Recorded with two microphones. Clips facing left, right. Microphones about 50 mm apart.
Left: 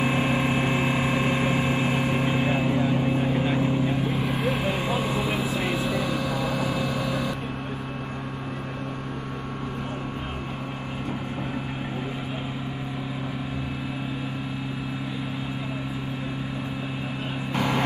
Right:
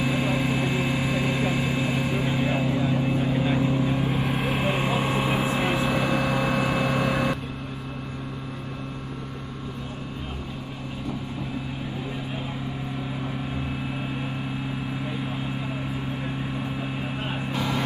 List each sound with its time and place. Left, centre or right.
0.0 s a sound: left
3.5 s vehicle: left
3.9 s vehicle: centre
4.6 s vehicle: centre; by 7.3 s right
17.5 s vehicle: left